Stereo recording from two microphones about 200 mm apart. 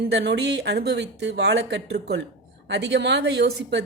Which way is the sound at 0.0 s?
55° right (ahead or behind).